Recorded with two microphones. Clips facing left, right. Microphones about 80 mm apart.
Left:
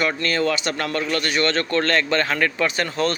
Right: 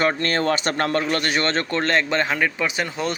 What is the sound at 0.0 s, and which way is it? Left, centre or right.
A man's voice, right.